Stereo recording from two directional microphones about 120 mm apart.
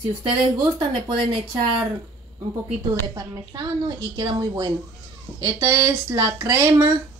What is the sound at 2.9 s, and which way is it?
A woman's voice, 30° right (ahead or behind).